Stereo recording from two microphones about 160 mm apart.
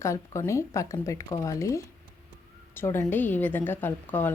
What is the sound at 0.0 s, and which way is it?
A woman's voice, 20° left (ahead or behind).